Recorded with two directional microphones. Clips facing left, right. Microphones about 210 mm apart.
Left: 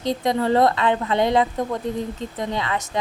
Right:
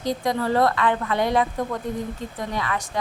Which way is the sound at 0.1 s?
20° left (ahead or behind).